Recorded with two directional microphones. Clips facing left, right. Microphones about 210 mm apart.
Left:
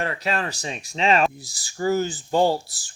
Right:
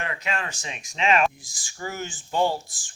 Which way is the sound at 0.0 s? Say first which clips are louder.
Left 5 dB; 35° left (ahead or behind).